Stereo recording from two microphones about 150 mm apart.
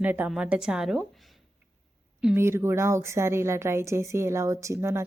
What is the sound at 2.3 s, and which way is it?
Speech, 15° right (ahead or behind).